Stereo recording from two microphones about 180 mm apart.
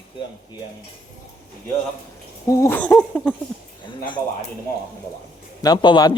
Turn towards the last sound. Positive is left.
turn(degrees=25)  # may be behind; listen again after turning